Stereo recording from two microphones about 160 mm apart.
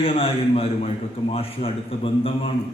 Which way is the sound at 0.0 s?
35° left (ahead or behind).